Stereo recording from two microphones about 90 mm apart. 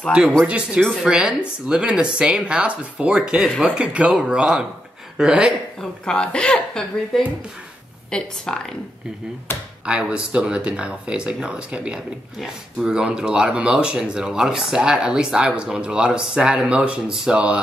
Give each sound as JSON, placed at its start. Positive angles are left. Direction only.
{"t": 0.5, "sound": "speech", "side_deg": -15}
{"t": 5.8, "sound": "a woman's voice", "side_deg": 10}
{"t": 8.1, "sound": "a woman's voice", "side_deg": 5}
{"t": 9.5, "sound": "speech", "side_deg": 25}
{"t": 9.8, "sound": "speech", "side_deg": -10}